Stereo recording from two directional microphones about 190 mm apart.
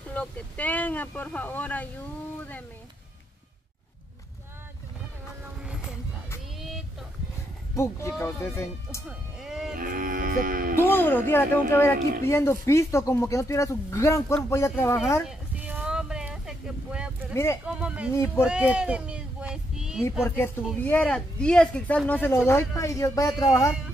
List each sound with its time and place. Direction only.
0.1 s speech: 10° left (ahead or behind)
7.7 s speech: 15° left (ahead or behind)
9.4 s a sound: 5° right (ahead or behind)
9.8 s speech: 45° right (ahead or behind)
10.8 s speech: 10° left (ahead or behind)
15.2 s a sound: 5° right (ahead or behind)
17.3 s speech: 15° left (ahead or behind)
17.6 s speech: 5° right (ahead or behind)
18.1 s speech: 15° left (ahead or behind)
18.5 s child singing: 5° right (ahead or behind)
20.2 s speech: 10° left (ahead or behind)